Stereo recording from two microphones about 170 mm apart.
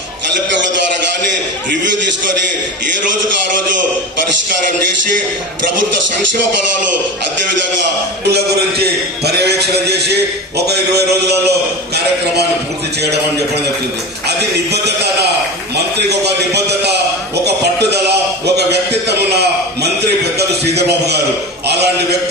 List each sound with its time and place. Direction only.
8.3 s a man's voice: 70° right (ahead or behind)
14.3 s a man's voice: 75° right (ahead or behind)
17.9 s a sound: 75° right (ahead or behind)